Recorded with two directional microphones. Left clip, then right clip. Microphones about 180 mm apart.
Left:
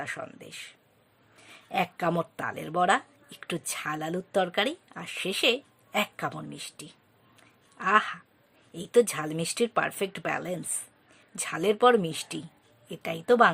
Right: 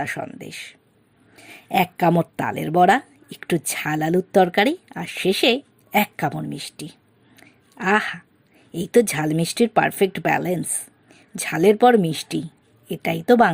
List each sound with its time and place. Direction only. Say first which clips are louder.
0.0 s speech: right 9 dB; 25° right (ahead or behind)
7.3 s a sound: right 7 dB; 25° right (ahead or behind)
8.7 s speech: right 5 dB; 25° right (ahead or behind)